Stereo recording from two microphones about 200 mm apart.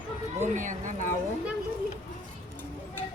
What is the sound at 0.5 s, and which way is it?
Speech, 40° right (ahead or behind).